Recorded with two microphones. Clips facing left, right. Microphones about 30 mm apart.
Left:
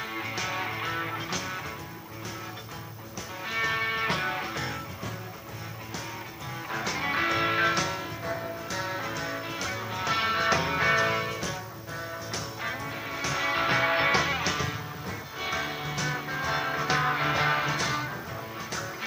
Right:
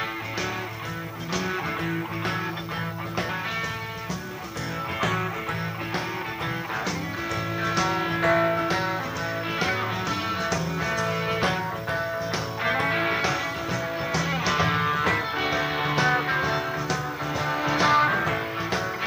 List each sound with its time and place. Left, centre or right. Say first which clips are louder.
7.2 s music: left 4 dB; left
8.2 s music: right 12 dB; right
8.6 s music: right 7 dB; right
10.0 s music: left 1 dB; centre
10.5 s music: left 3 dB; left
12.7 s music: right 11 dB; right
13.5 s music: left 4 dB; left
14.8 s music: right 14 dB; right
15.4 s music: right 1 dB; centre
15.8 s music: right 9 dB; right
16.5 s music: right 1 dB; centre
17.3 s music: right 2 dB; centre
17.7 s music: right 9 dB; right